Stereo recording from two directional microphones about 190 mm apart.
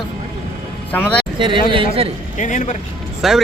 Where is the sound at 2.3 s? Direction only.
40° left (ahead or behind).